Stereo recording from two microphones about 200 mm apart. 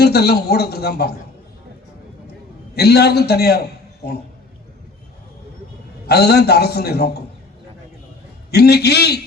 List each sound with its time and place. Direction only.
0.0 s a man's voice: 55° left (ahead or behind)
2.7 s a man's voice: 55° left (ahead or behind)
6.1 s a man's voice: 55° left (ahead or behind)
8.4 s a man's voice: 55° left (ahead or behind)